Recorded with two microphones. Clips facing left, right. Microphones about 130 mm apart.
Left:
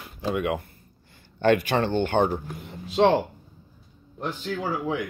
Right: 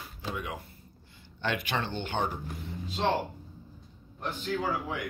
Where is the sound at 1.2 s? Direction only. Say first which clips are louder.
Left 12 dB; 50° left (ahead or behind).